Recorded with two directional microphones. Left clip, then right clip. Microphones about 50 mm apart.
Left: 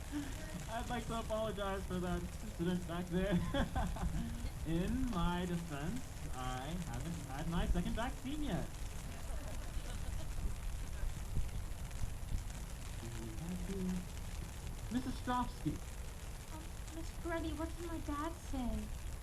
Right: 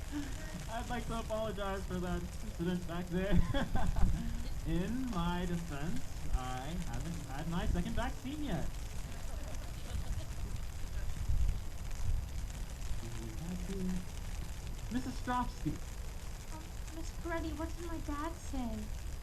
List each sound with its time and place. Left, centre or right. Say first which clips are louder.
0.1 s a sound: right 1 dB; centre
0.8 s speech: right 1 dB; centre
5.5 s speech: right 1 dB; centre
14.9 s speech: right 2 dB; centre
17.2 s speech: right 1 dB; centre